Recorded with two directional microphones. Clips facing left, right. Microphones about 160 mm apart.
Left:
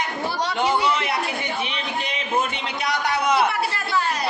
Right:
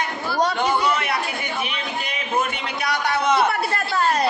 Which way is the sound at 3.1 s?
15° left (ahead or behind).